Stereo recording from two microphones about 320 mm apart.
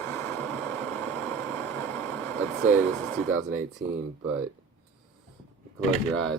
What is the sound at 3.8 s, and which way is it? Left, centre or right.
Speech, right.